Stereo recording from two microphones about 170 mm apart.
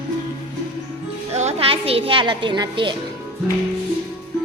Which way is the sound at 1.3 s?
40° right (ahead or behind).